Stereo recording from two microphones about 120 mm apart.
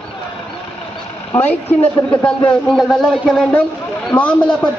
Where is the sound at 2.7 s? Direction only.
Centre (ahead or behind).